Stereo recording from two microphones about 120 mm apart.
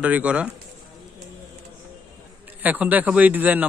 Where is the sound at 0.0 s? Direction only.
10° right (ahead or behind).